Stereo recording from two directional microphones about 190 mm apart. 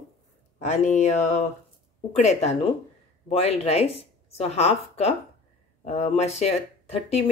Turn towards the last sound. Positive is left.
turn(degrees=35)  # may be behind; listen again after turning